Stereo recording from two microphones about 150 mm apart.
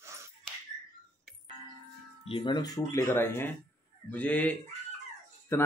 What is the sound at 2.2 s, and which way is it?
A man's voice, 35° left (ahead or behind).